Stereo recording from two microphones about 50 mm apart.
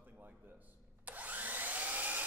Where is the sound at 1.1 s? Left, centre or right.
Right.